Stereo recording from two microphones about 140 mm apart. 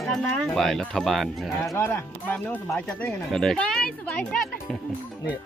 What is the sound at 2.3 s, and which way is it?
Speech, 10° left (ahead or behind).